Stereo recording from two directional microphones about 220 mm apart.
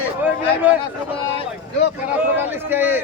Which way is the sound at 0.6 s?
5° right (ahead or behind).